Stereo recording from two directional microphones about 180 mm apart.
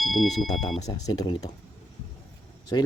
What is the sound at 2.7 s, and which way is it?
Speech, 25° left (ahead or behind).